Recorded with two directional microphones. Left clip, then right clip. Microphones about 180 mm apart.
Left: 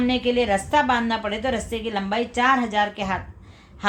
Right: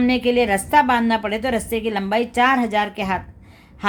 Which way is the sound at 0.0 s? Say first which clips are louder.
Right 3 dB; 45° right (ahead or behind).